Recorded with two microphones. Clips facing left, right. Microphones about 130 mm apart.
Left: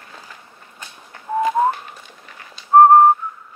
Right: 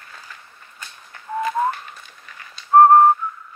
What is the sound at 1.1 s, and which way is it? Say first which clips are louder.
Whistling: left 5 dB; 25° left (ahead or behind).